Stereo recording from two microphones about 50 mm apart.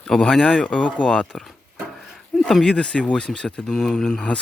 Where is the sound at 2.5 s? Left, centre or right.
Centre.